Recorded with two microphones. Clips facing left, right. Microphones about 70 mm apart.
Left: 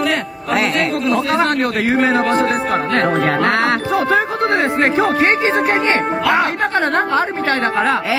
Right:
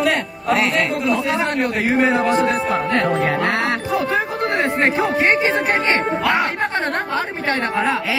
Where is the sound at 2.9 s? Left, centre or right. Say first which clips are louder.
Left 3 dB; left.